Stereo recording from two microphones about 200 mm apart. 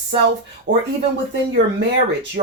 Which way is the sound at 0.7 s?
40° right (ahead or behind).